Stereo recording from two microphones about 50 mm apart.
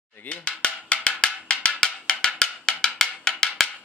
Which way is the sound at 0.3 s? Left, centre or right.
Left.